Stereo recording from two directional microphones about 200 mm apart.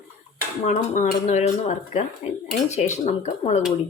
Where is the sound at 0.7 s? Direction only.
40° left (ahead or behind).